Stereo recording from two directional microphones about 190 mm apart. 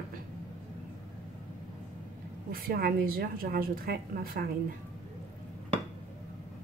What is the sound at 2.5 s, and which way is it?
A woman's voice, 50° right (ahead or behind).